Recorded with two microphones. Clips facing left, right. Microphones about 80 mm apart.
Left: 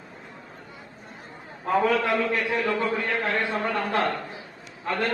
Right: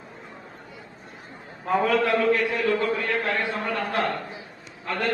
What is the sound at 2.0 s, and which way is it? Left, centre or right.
A man's voice, left.